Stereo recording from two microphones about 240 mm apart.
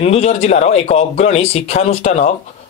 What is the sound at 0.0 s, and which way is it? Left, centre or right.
Speech, left.